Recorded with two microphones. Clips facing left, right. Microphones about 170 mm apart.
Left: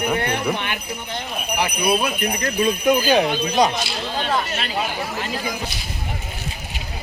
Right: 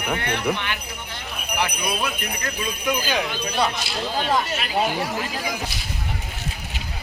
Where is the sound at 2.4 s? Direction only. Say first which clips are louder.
Left 8 dB; 45° left (ahead or behind).